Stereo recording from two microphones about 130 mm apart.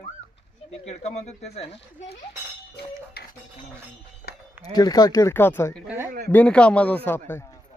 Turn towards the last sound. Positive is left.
turn(degrees=20)  # may be behind; listen again after turning